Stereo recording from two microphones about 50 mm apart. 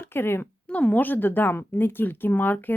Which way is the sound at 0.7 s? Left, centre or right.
Left.